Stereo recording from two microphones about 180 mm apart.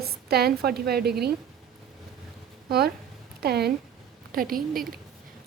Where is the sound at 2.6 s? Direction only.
60° right (ahead or behind).